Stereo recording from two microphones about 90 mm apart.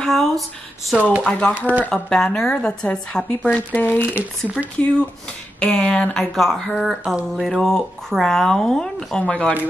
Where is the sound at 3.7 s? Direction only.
25° left (ahead or behind).